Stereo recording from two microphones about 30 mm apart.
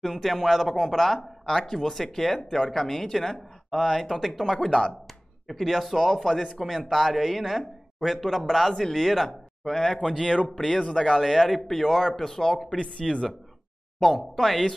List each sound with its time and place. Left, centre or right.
0.0 s speech: centre
4.2 s speech: centre
10.3 s speech: left
11.1 s speech: centre
13.0 s speech: centre